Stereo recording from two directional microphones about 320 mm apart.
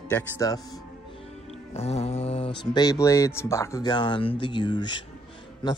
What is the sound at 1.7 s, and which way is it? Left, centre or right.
Speech, centre.